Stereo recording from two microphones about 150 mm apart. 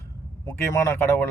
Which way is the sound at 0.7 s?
15° left (ahead or behind).